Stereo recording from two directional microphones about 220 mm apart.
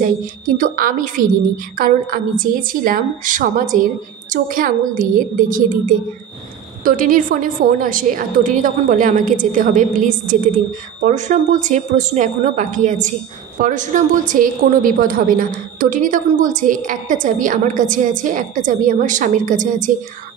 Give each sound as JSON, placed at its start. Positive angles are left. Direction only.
{"t": 0.2, "sound": "a woman's voice", "side_deg": -40}